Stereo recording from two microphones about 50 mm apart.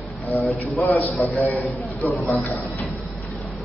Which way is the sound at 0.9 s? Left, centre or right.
Left.